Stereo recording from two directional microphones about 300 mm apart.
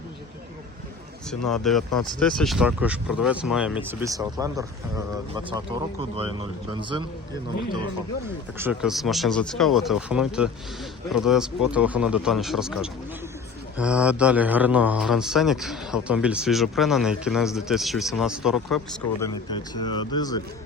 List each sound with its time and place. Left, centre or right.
1.3 s a man's voice: centre
6.1 s speech: left
8.5 s a man's voice: centre
19.3 s speech: centre